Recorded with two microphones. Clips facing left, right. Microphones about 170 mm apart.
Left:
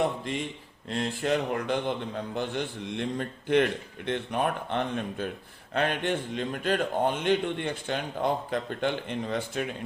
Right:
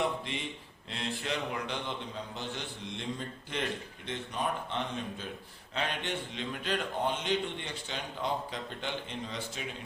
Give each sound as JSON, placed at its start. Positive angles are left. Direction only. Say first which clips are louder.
{"t": 0.9, "sound": "a man's voice", "louder": "left 8 dB", "side_deg": 45}